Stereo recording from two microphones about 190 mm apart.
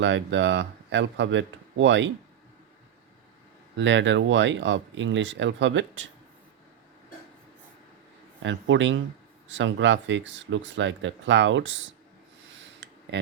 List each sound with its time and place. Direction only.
0.0 s speech: 75° right (ahead or behind)
3.8 s speech: 70° right (ahead or behind)
8.4 s speech: 75° right (ahead or behind)
12.8 s a sound: 70° right (ahead or behind)